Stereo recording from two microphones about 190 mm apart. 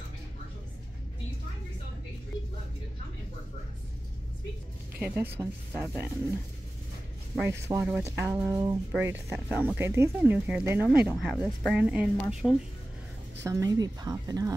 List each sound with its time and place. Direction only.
4.9 s speech: 10° right (ahead or behind)
7.6 s speech: 10° right (ahead or behind)
13.4 s a woman's voice: 15° right (ahead or behind)